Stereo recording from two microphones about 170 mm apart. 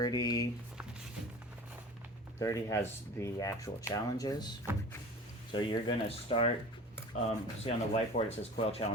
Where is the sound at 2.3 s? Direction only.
15° left (ahead or behind); by 6.4 s 35° left (ahead or behind).